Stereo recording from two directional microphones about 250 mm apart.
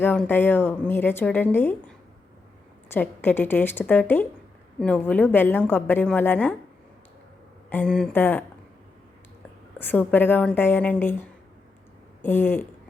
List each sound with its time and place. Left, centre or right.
0.0 s a woman's voice: centre
2.9 s a woman's voice: centre
7.7 s a woman's voice: centre
9.7 s a woman's voice: centre
12.2 s a woman's voice: centre